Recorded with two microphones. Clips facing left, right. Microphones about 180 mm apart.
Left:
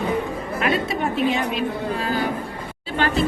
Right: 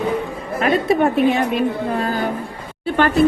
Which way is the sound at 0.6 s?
55° right (ahead or behind).